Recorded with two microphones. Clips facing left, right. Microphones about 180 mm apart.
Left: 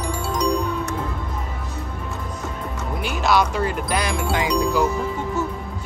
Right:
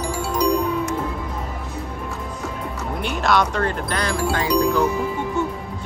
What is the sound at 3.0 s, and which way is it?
Speech, 5° left (ahead or behind).